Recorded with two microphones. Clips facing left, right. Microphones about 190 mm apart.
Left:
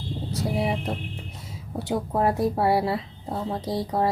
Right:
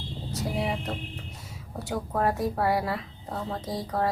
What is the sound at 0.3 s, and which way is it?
Speech, 25° left (ahead or behind).